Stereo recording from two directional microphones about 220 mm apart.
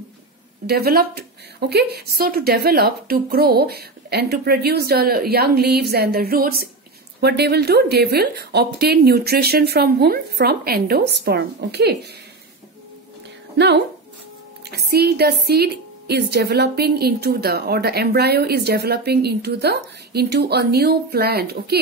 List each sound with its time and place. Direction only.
0.7 s speech: 45° right (ahead or behind)
13.6 s a woman's voice: 50° right (ahead or behind)